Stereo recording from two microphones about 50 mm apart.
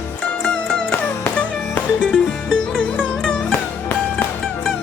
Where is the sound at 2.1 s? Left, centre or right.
Centre.